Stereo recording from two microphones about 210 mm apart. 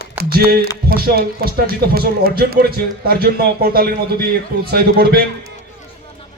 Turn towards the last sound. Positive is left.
turn(degrees=-45)  # may be behind; listen again after turning